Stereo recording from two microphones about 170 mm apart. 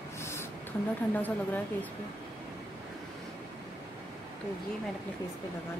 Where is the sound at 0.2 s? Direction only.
15° left (ahead or behind).